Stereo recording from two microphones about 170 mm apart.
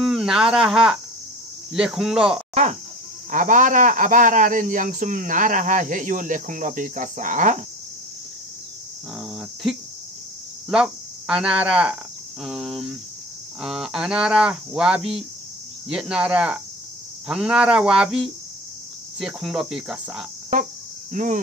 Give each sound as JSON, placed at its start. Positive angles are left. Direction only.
{"t": 0.0, "sound": "speech", "side_deg": 0}
{"t": 2.5, "sound": "a man's voice", "side_deg": -40}
{"t": 9.2, "sound": "speech", "side_deg": 0}
{"t": 21.1, "sound": "cricket", "side_deg": -50}